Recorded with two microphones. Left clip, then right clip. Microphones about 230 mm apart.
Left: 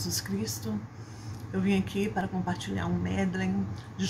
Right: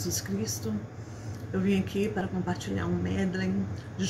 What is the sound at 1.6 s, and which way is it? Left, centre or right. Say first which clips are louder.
A woman's voice: right 1 dB; centre.